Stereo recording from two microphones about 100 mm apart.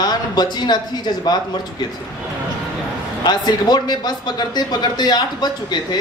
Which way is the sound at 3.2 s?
45° left (ahead or behind).